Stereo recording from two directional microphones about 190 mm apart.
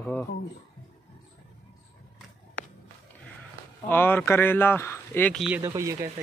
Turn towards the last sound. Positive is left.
turn(degrees=-15)  # may be behind; listen again after turning